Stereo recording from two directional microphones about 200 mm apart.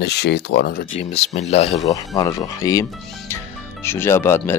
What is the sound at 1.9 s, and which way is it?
Speech, 15° left (ahead or behind).